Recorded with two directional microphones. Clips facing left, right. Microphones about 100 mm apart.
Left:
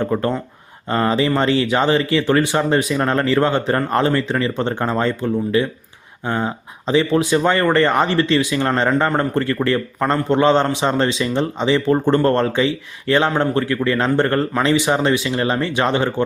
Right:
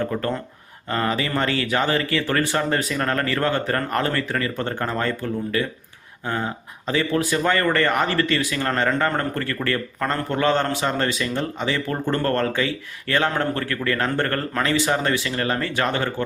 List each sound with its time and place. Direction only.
0.0 s speech: 25° left (ahead or behind)